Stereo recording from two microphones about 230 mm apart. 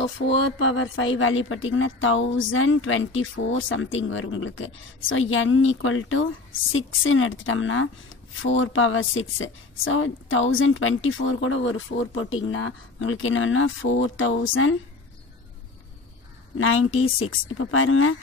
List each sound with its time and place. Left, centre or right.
0.0 s speech: left
16.5 s speech: left